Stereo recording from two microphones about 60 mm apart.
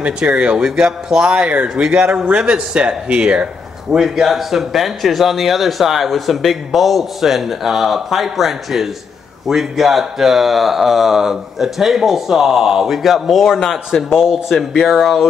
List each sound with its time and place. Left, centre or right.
0.0 s speech: centre
3.9 s speech: centre